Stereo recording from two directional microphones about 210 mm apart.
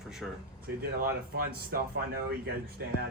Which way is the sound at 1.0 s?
45° right (ahead or behind).